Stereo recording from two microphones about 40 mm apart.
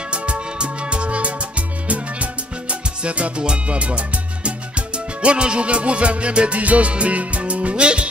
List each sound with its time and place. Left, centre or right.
0.1 s music: right
2.7 s music: right